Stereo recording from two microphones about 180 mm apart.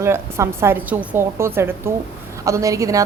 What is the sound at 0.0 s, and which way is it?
A woman's voice, 15° right (ahead or behind).